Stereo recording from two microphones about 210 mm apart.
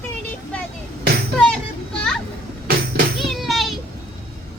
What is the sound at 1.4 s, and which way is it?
Children playing, 5° left (ahead or behind).